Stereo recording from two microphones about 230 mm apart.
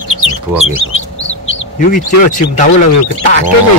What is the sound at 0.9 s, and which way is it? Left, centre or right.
Bird, left.